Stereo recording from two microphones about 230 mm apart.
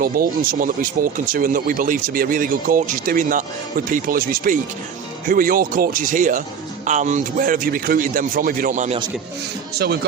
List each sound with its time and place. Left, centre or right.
0.0 s speech: right
9.7 s speech: right